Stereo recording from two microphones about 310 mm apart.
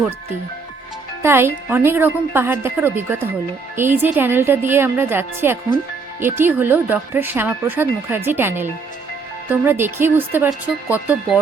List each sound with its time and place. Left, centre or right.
1.2 s speech: centre